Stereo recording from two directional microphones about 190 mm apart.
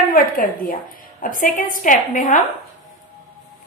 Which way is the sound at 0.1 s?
50° left (ahead or behind).